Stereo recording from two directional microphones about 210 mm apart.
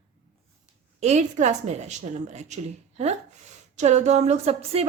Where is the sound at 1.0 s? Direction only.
35° right (ahead or behind).